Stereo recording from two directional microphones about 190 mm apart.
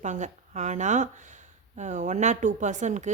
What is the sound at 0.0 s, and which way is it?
Speech, 40° right (ahead or behind).